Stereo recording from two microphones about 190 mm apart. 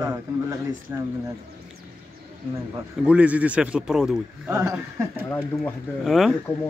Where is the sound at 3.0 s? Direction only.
5° right (ahead or behind).